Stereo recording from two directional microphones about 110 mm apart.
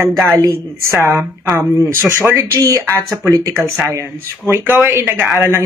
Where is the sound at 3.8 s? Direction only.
20° right (ahead or behind).